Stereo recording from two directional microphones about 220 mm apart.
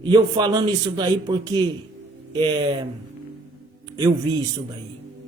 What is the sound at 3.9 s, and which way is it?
Music, 20° right (ahead or behind).